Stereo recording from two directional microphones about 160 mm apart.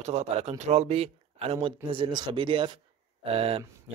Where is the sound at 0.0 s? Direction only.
45° right (ahead or behind).